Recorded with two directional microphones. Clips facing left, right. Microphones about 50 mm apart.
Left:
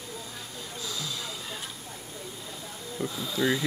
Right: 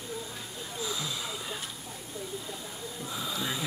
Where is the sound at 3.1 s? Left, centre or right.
Centre.